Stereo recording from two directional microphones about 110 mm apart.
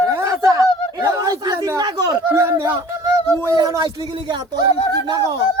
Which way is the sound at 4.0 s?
45° right (ahead or behind).